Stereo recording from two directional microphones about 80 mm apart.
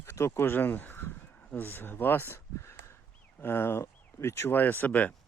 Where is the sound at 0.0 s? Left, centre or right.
Left.